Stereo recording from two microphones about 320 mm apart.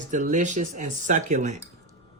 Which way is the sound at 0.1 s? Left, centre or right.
Right.